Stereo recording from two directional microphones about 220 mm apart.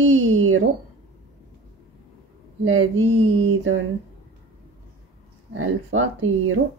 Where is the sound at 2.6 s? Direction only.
65° right (ahead or behind).